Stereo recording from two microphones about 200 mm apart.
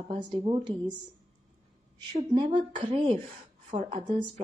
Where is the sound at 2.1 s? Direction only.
20° right (ahead or behind).